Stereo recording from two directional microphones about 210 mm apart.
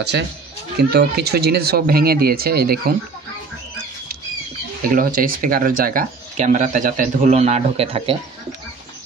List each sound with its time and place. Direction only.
0.7 s speech: 50° right (ahead or behind)
4.8 s speech: 40° right (ahead or behind)